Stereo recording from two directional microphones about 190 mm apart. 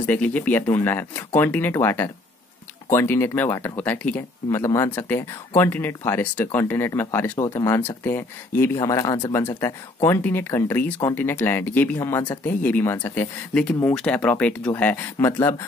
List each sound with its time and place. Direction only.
0.0 s speech: 10° left (ahead or behind); by 9.3 s 25° left (ahead or behind)
9.3 s speech: 10° left (ahead or behind)